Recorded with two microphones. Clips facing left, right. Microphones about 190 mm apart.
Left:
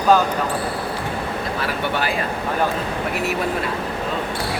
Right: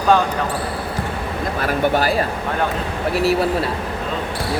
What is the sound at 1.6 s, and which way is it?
Speech, 40° right (ahead or behind).